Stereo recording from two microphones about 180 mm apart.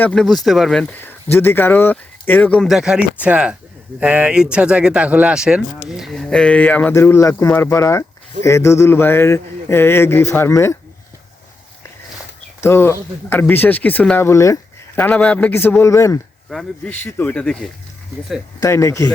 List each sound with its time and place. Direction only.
0.0 s speech: 5° left (ahead or behind)
12.6 s speech: 15° left (ahead or behind)
16.5 s speech: 5° left (ahead or behind)
18.6 s speech: 15° left (ahead or behind)